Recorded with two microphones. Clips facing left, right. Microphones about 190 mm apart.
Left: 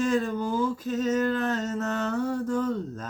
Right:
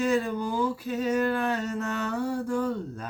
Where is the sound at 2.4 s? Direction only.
10° right (ahead or behind).